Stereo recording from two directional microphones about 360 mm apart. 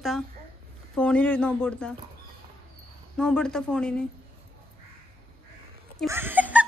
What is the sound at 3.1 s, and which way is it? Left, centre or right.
Speech, centre.